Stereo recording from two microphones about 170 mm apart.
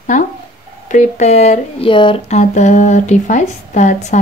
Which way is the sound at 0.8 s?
45° left (ahead or behind).